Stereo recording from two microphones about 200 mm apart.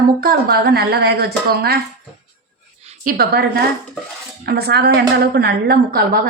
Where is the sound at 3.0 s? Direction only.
50° right (ahead or behind).